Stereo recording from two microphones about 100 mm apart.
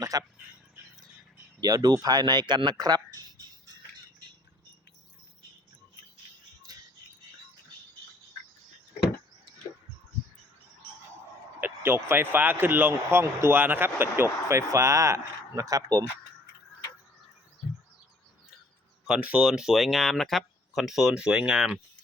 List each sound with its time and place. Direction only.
0.0 s speech: 35° right (ahead or behind)
1.6 s speech: 40° right (ahead or behind)
11.6 s speech: 25° right (ahead or behind)
19.0 s speech: 10° right (ahead or behind)